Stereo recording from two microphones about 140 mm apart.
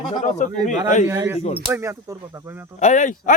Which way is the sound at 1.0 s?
20° right (ahead or behind).